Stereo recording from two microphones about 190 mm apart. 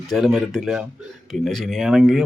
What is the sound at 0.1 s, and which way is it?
Speech, centre (ahead or behind).